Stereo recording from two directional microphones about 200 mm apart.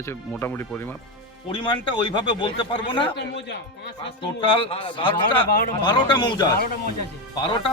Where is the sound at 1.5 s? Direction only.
25° left (ahead or behind).